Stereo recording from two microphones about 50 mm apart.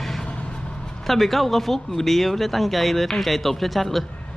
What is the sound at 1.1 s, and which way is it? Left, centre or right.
Speech, centre.